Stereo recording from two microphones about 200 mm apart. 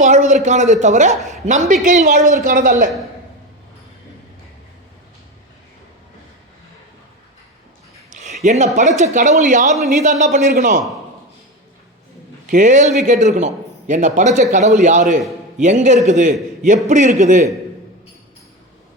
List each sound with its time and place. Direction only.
0.0 s a man's voice: 35° right (ahead or behind)
8.1 s a sound: 35° right (ahead or behind)
8.4 s a man's voice: 35° right (ahead or behind)
12.5 s a man's voice: 40° right (ahead or behind)